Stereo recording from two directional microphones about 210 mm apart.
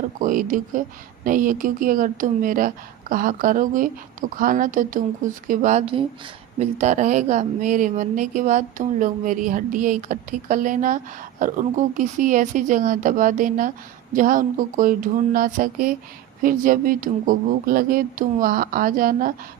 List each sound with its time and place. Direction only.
0.2 s speech: 40° right (ahead or behind)
5.8 s speech: 25° right (ahead or behind); by 19.3 s 40° right (ahead or behind)